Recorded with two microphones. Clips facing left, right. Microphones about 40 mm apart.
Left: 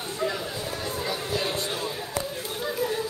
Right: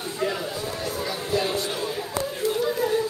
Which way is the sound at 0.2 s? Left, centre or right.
Right.